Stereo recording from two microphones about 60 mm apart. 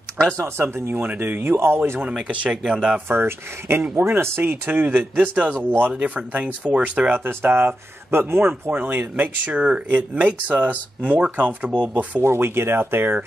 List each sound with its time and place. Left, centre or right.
0.2 s speech: centre
0.6 s speech: right
0.9 s speech: right
2.0 s speech: centre
3.1 s speech: right
7.4 s speech: right
8.7 s speech: right
12.2 s speech: right